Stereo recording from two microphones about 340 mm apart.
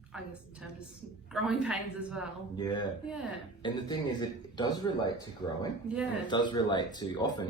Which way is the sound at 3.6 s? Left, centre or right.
Centre.